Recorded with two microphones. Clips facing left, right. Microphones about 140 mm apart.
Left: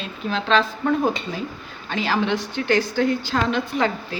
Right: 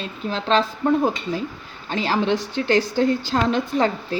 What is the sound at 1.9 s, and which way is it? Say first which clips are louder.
A woman's voice: right 1 dB; 35° right (ahead or behind).